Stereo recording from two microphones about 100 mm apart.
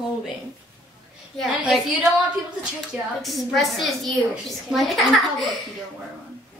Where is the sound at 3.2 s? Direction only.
Centre (ahead or behind).